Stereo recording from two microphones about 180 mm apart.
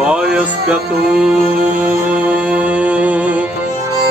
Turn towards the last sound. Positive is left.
turn(degrees=-10)  # may be behind; listen again after turning